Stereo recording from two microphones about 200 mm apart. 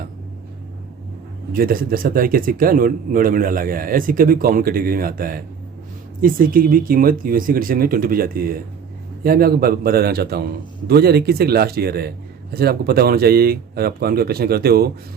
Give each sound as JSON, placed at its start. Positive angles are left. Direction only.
{"t": 1.5, "sound": "a man's voice", "side_deg": -45}